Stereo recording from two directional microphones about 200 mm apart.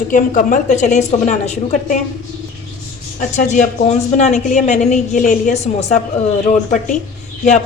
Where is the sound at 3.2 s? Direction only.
35° left (ahead or behind).